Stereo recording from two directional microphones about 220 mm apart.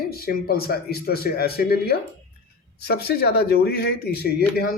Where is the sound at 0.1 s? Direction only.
45° left (ahead or behind).